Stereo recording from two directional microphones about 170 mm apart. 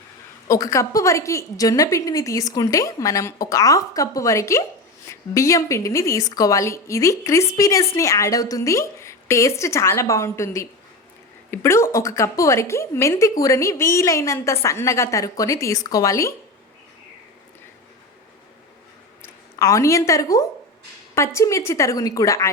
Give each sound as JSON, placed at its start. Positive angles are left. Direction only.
{"t": 0.4, "sound": "a woman's voice", "side_deg": 20}
{"t": 19.5, "sound": "a woman's voice", "side_deg": 20}